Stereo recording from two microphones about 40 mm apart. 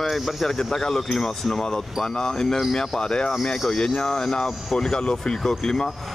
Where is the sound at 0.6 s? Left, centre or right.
Centre.